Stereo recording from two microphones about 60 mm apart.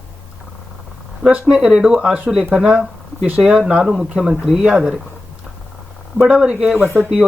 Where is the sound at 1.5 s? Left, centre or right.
Centre.